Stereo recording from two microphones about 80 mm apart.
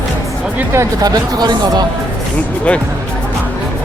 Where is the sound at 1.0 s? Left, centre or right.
Right.